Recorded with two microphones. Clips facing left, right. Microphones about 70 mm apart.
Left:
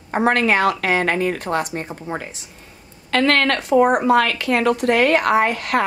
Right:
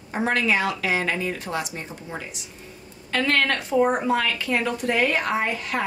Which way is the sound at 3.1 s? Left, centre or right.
Left.